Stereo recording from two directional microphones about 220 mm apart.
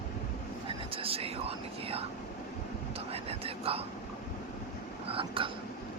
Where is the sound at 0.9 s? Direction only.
25° right (ahead or behind).